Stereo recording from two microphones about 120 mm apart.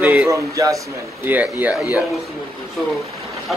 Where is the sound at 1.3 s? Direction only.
15° right (ahead or behind).